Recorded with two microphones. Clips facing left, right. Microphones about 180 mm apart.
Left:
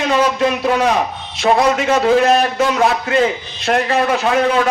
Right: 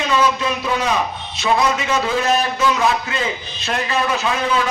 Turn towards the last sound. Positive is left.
turn(degrees=55)  # may be behind; listen again after turning